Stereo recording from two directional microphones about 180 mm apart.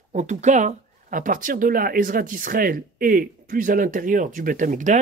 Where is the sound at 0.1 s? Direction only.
40° right (ahead or behind).